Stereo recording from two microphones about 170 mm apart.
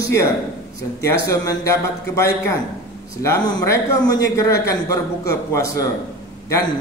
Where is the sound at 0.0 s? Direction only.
15° left (ahead or behind).